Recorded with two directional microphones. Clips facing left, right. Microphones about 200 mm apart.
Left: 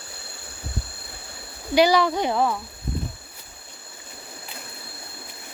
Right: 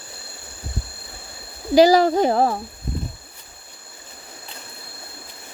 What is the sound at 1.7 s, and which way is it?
Speech, 40° right (ahead or behind).